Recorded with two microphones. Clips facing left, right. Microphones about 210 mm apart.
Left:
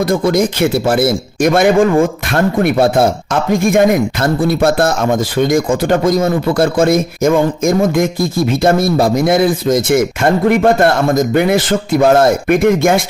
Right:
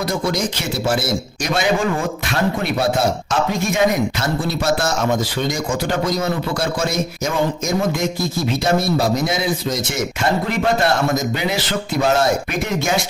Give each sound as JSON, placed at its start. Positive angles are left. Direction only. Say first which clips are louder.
{"t": 0.0, "sound": "speech", "louder": "left 8 dB", "side_deg": 55}